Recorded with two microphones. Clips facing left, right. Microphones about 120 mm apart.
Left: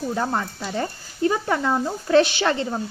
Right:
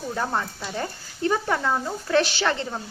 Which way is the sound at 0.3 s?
15° left (ahead or behind).